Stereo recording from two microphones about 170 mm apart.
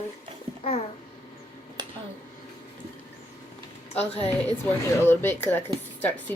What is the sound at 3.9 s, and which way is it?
Speech, 35° left (ahead or behind).